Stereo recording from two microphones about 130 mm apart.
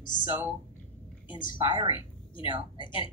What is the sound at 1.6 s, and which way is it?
Speech, 40° right (ahead or behind).